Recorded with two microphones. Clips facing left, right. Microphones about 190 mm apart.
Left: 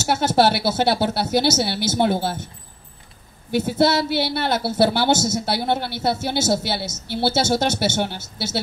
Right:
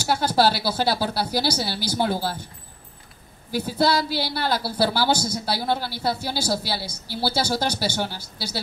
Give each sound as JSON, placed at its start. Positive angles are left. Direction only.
{"t": 0.0, "sound": "a woman's voice", "side_deg": 25}
{"t": 3.5, "sound": "a woman's voice", "side_deg": 25}